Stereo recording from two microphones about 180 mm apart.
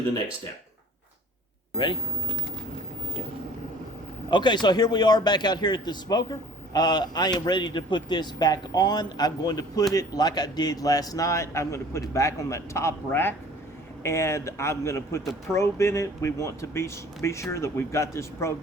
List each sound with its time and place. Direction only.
4.3 s a man's voice: 25° left (ahead or behind)